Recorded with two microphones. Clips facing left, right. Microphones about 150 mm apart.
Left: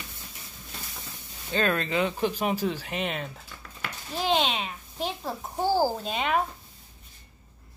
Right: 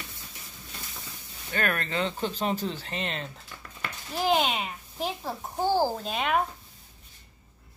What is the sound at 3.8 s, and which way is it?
A child's voice, 5° right (ahead or behind).